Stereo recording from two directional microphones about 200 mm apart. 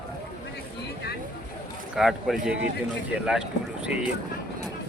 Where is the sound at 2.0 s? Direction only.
Centre (ahead or behind).